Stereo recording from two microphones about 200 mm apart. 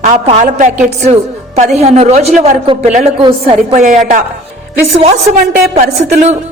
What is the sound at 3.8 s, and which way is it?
Speech, 40° right (ahead or behind).